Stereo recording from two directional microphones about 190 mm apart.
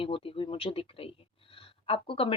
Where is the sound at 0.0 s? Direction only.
30° left (ahead or behind).